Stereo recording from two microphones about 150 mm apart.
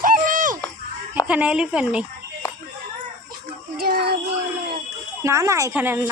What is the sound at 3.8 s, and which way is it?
Music, 90° right.